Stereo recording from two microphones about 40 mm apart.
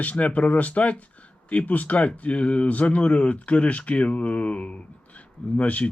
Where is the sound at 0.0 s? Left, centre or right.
Left.